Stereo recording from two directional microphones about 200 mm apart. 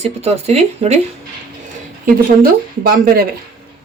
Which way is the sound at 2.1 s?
45° right (ahead or behind).